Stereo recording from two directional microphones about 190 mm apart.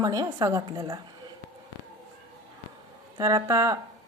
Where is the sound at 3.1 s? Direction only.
20° right (ahead or behind).